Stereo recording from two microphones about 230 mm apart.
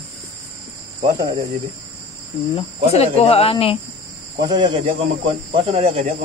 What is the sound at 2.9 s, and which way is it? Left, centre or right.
Speech, left.